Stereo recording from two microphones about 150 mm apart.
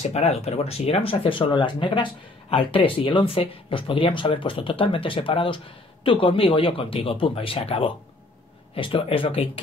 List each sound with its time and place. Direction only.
0.1 s speech: 45° left (ahead or behind)